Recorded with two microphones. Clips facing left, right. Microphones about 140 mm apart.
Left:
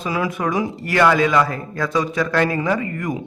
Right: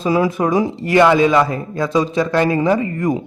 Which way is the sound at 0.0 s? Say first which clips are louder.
Right 6 dB; 30° right (ahead or behind).